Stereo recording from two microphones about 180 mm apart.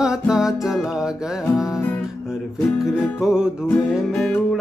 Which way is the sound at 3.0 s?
5° right (ahead or behind).